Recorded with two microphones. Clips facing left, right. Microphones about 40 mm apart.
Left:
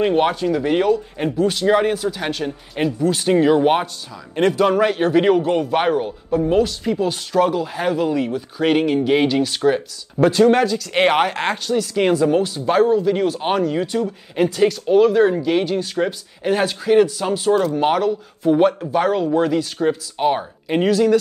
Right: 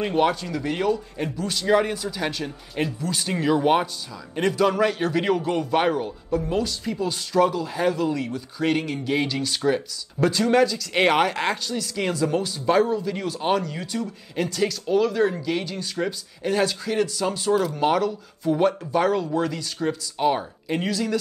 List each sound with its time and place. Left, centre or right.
0.0 s a man's voice: centre
3.1 s a man's voice: left